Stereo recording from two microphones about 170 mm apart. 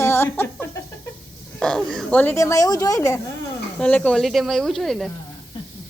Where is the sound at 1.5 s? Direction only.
5° left (ahead or behind); by 3.2 s 20° left (ahead or behind).